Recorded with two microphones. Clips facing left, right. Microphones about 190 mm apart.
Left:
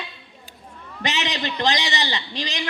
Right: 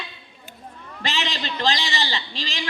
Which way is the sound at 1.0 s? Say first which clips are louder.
Left 2 dB; 20° left (ahead or behind).